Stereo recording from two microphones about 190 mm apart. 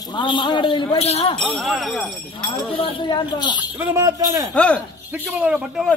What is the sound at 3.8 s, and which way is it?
Speech, 15° right (ahead or behind).